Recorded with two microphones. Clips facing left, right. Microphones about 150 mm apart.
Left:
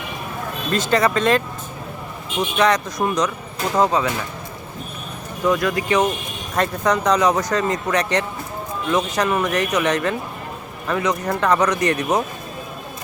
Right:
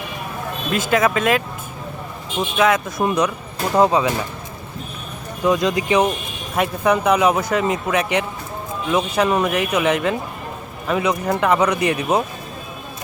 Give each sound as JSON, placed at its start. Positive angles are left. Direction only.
{"t": 0.7, "sound": "speech", "side_deg": -5}
{"t": 2.6, "sound": "speech", "side_deg": -5}
{"t": 5.5, "sound": "speech", "side_deg": -20}